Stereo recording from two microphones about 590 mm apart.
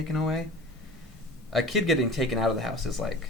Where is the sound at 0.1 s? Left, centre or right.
Centre.